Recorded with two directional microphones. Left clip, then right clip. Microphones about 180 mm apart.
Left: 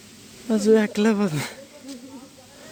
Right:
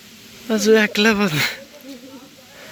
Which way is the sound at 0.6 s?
10° left (ahead or behind).